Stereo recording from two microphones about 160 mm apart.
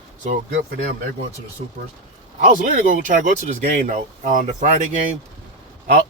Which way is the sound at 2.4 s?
50° right (ahead or behind).